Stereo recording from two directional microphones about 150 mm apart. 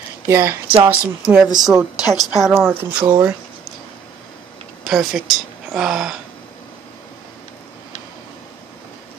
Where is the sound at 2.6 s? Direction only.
10° right (ahead or behind).